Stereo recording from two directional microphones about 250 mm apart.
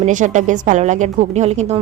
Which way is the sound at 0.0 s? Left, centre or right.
Right.